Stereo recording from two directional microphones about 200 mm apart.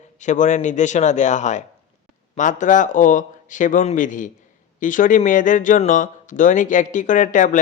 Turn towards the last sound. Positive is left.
turn(degrees=40)  # may be behind; listen again after turning